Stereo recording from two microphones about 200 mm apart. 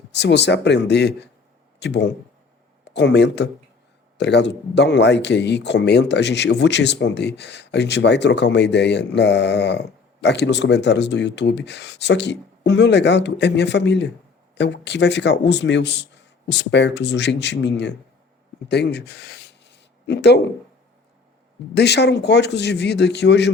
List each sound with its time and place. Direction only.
0.1 s speech: 60° left (ahead or behind)
21.8 s speech: 55° left (ahead or behind)